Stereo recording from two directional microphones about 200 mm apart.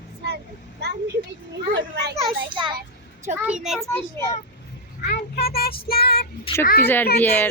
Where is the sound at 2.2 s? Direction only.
25° right (ahead or behind).